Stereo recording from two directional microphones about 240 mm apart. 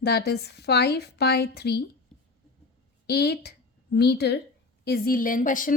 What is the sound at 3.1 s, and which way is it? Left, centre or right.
A woman's voice, left.